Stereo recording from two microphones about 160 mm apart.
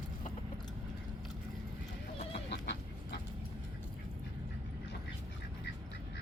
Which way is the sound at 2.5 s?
90° left.